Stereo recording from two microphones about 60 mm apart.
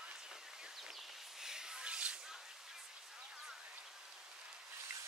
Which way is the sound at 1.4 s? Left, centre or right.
Centre.